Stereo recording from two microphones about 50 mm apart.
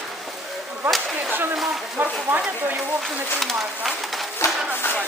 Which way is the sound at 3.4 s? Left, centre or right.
Centre.